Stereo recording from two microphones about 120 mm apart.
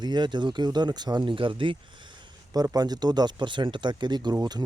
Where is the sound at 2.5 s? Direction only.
30° right (ahead or behind).